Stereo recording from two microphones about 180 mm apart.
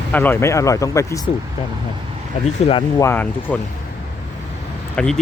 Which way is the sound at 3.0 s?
10° left (ahead or behind).